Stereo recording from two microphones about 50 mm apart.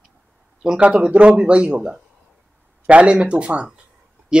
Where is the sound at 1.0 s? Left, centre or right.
Right.